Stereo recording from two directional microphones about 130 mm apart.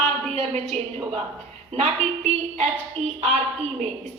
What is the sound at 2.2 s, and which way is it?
Music, 55° right (ahead or behind).